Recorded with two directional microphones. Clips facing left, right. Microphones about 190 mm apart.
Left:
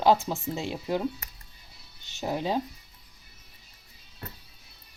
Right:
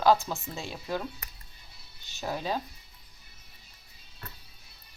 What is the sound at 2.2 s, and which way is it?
Speech, 20° left (ahead or behind).